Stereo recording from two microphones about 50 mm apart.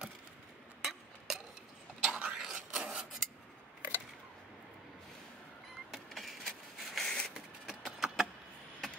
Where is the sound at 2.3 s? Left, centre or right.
Centre.